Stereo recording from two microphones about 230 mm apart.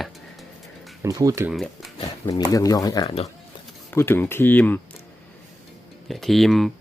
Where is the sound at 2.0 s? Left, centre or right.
Centre.